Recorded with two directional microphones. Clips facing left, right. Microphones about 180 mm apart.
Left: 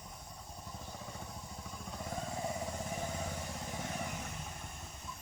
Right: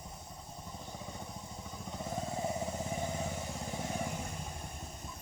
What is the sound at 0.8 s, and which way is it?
Motorcycle, 15° right (ahead or behind).